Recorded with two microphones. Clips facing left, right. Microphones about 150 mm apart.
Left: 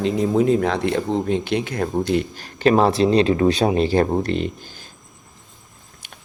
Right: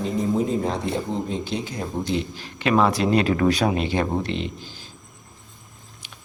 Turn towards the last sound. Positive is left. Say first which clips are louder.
# left 5 dB
turn(degrees=50)  # may be behind; listen again after turning